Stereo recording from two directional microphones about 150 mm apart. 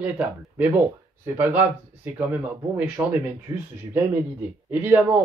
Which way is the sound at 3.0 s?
10° right (ahead or behind).